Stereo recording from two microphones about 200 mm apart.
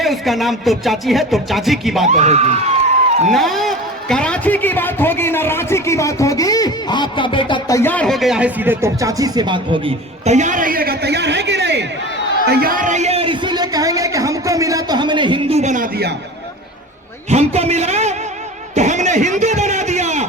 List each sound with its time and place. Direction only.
0.0 s a man's voice: centre (ahead or behind)
2.0 s a man's voice: 35° right (ahead or behind)
3.3 s a man's voice: centre (ahead or behind); by 11.9 s 60° right (ahead or behind)
12.5 s a sound: 50° right (ahead or behind)
17.2 s a man's voice: 30° right (ahead or behind)
18.7 s a sound: 35° right (ahead or behind)